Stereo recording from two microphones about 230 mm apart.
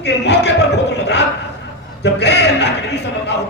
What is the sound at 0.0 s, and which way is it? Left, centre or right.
A man's voice, left.